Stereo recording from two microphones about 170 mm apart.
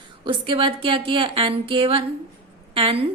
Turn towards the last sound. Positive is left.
turn(degrees=-30)  # may be behind; listen again after turning